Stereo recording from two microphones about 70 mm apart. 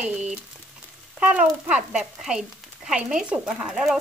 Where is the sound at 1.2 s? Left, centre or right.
Centre.